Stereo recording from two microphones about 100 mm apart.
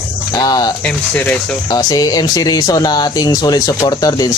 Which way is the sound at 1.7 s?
40° left (ahead or behind).